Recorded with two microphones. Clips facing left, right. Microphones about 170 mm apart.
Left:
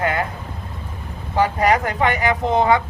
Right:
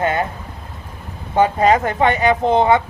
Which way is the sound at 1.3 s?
20° right (ahead or behind).